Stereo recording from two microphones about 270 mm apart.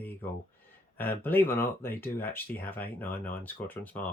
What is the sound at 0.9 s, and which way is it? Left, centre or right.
Speech, centre.